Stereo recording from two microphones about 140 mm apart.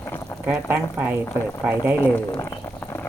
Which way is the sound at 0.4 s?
15° right (ahead or behind).